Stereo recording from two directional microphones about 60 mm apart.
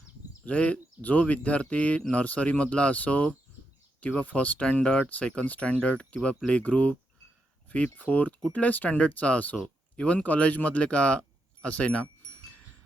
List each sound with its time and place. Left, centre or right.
0.4 s speech: left
7.9 s speech: left